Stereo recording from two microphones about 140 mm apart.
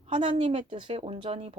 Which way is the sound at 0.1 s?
40° right (ahead or behind).